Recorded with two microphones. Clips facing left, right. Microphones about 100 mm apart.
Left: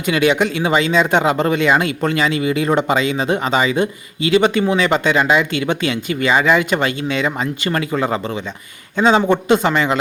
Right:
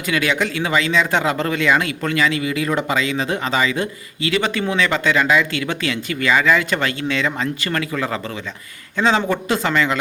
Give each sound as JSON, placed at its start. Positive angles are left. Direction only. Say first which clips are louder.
{"t": 0.0, "sound": "speech", "louder": "left 5 dB", "side_deg": 20}